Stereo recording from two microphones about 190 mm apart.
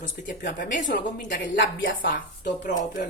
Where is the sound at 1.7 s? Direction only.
90° left.